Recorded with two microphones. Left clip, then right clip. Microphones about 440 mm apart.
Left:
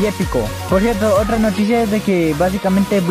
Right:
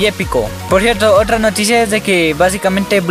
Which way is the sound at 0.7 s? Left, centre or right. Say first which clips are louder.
Right 5 dB; right.